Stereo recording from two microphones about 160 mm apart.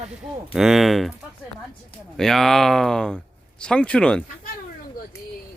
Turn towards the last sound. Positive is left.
turn(degrees=5)  # may be behind; listen again after turning